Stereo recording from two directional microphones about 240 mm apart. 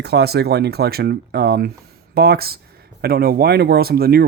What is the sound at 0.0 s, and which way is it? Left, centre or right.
Speech, right.